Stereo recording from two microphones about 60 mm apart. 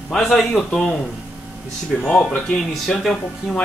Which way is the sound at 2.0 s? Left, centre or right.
Centre.